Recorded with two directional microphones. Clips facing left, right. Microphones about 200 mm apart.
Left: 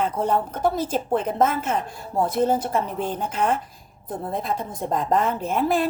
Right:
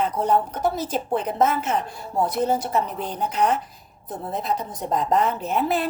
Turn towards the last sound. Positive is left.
turn(degrees=45)  # may be behind; listen again after turning